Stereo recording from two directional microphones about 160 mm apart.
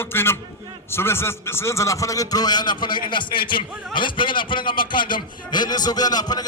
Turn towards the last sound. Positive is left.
turn(degrees=25)  # may be behind; listen again after turning